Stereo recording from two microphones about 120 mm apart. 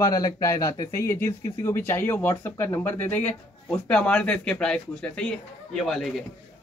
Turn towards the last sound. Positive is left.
turn(degrees=0)  # may be behind; listen again after turning